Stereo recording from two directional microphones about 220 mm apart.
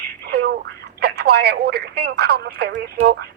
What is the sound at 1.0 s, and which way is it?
Speech, 45° right (ahead or behind).